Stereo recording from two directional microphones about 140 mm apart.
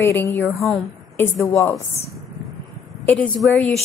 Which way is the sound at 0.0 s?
20° left (ahead or behind).